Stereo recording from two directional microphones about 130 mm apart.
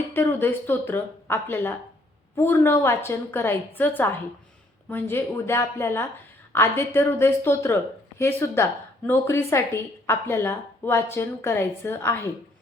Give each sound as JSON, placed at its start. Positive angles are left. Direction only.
{"t": 0.1, "sound": "a woman's voice", "side_deg": 15}